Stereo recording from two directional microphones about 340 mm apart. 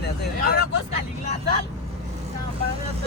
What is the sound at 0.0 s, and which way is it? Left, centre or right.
Vehicle, left.